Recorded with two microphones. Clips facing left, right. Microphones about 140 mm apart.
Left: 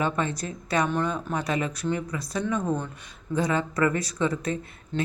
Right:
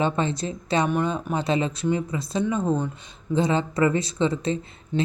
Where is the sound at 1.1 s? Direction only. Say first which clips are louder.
Right 3 dB; 25° right (ahead or behind).